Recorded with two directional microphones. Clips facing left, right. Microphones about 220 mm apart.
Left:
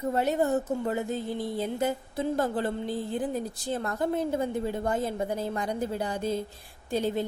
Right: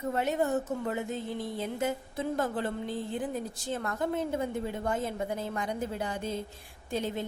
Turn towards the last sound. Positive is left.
turn(degrees=35)  # may be behind; listen again after turning